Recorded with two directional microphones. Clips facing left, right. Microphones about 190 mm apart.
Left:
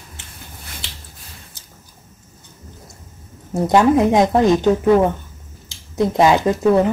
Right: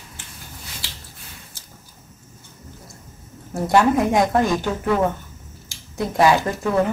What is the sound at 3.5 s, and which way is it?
Speech, 20° left (ahead or behind).